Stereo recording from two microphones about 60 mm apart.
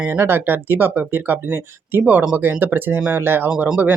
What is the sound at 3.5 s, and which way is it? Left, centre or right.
Speech, centre.